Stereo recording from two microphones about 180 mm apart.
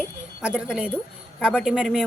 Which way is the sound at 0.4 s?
5° right (ahead or behind).